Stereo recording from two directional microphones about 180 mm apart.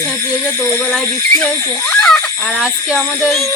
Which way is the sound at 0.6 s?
Centre (ahead or behind).